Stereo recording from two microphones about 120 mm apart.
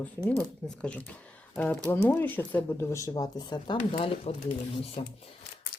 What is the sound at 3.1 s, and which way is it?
Speech, 35° left (ahead or behind).